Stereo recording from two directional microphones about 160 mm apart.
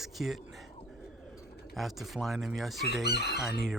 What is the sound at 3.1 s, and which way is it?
Chicken, 90° left.